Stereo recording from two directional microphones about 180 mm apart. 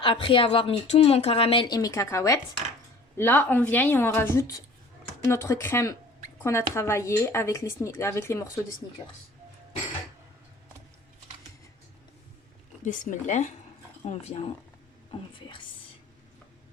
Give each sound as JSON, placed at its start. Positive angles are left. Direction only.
{"t": 0.0, "sound": "speech", "side_deg": 30}
{"t": 9.0, "sound": "speech", "side_deg": 25}
{"t": 12.8, "sound": "speech", "side_deg": 45}